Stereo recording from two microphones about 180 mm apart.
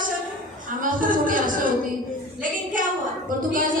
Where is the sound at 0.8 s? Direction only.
50° right (ahead or behind).